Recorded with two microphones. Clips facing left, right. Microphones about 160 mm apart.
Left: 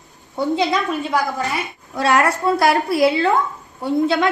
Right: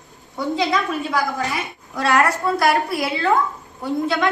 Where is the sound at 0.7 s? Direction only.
20° left (ahead or behind).